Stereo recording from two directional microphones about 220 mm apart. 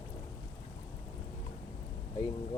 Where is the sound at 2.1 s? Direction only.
20° left (ahead or behind).